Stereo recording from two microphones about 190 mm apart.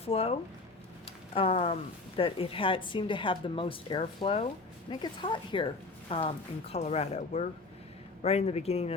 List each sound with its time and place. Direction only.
0.0 s a woman's voice: 30° left (ahead or behind)